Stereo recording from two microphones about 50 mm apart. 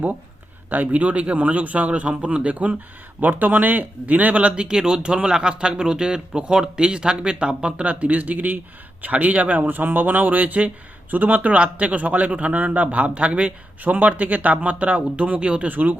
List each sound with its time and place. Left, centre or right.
0.7 s a man's voice: right
15.7 s a man's voice: right